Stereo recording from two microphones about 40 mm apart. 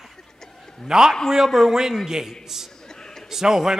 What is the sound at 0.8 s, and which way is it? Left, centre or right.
A man's voice, centre.